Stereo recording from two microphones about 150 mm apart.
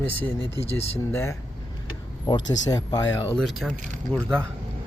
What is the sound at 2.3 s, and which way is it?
Speech, 30° left (ahead or behind).